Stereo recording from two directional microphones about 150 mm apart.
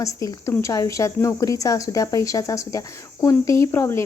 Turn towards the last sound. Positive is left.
turn(degrees=15)  # may be behind; listen again after turning